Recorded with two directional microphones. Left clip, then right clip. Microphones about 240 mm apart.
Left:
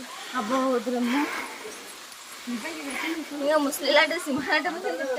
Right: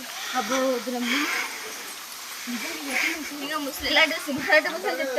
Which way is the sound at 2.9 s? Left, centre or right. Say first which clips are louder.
Right 6 dB; centre.